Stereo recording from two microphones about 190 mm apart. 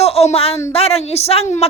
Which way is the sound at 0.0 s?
35° left (ahead or behind).